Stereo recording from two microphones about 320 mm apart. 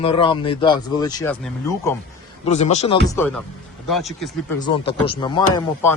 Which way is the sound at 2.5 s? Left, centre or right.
Left.